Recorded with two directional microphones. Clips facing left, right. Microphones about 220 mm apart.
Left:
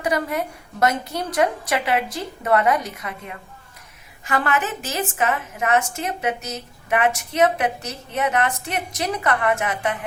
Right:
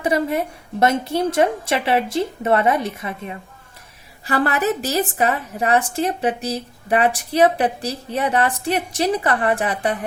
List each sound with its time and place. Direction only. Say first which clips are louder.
0.0 s a woman's voice: right 3 dB; 25° right (ahead or behind)